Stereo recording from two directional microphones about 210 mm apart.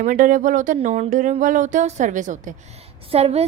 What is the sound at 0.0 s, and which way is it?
A woman's voice, 40° right (ahead or behind).